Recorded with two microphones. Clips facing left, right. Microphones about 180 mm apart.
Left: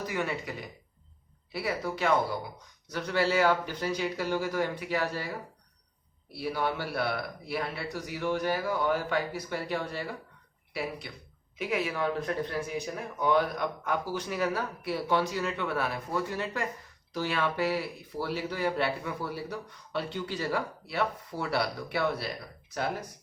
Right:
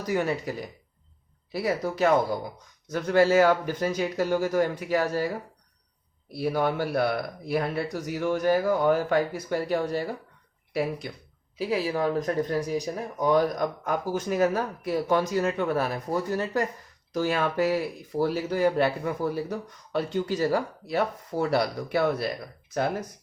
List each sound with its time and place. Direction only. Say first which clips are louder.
0.1 s speech: right 10 dB; 40° right (ahead or behind)
1.5 s speech: right 5 dB; 40° right (ahead or behind)
6.3 s speech: right 6 dB; 45° right (ahead or behind)
11.5 s speech: right 4 dB; 35° right (ahead or behind)